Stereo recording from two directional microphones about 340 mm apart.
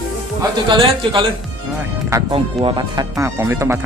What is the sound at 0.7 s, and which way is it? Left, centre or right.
Speech, centre.